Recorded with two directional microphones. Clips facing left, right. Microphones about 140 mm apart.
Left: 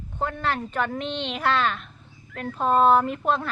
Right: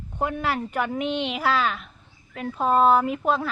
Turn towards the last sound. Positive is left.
turn(degrees=-5)  # may be behind; listen again after turning